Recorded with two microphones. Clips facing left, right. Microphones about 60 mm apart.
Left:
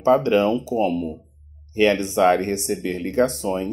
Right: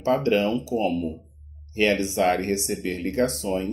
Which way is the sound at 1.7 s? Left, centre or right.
Left.